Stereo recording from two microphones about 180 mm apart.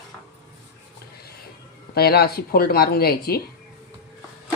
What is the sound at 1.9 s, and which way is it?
Speech, 60° left (ahead or behind).